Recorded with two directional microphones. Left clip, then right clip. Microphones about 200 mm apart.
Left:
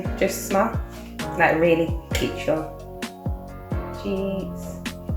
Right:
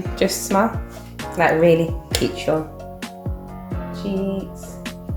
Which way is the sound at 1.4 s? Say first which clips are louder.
Right 3 dB; 50° right (ahead or behind).